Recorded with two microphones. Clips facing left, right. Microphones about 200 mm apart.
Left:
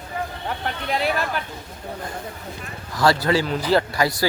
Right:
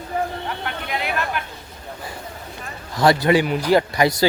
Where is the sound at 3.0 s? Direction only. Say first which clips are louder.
Right 3 dB; 20° right (ahead or behind).